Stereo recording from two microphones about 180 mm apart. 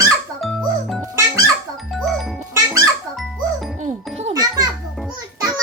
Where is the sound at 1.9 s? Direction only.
Centre (ahead or behind).